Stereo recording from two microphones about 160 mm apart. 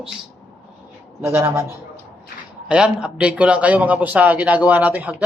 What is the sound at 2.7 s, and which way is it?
A man's voice, 5° right (ahead or behind).